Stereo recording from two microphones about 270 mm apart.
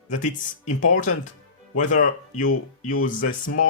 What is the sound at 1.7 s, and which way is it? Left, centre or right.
Speech, left.